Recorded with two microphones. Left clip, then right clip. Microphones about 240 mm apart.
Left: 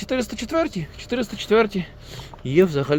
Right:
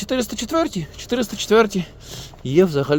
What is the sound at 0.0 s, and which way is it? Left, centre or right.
Speech, right.